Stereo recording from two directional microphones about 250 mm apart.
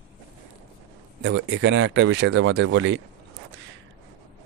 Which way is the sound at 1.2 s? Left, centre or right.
Right.